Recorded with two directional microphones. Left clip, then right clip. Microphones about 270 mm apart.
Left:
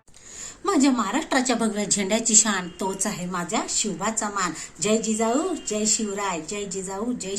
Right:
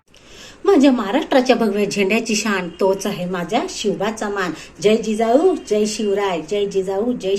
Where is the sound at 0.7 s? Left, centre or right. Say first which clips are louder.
Right 8 dB; centre.